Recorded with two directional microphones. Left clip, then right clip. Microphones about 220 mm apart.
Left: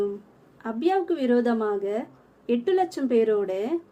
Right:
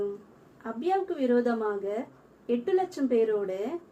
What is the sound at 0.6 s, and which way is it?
A woman's voice, 50° left (ahead or behind).